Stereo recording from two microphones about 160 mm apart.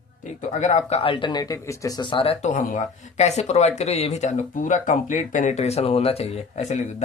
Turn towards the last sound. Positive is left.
turn(degrees=45)  # may be behind; listen again after turning